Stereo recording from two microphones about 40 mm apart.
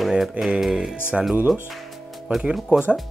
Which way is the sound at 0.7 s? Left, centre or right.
Centre.